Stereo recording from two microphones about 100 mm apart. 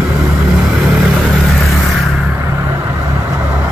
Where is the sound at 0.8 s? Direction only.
15° right (ahead or behind).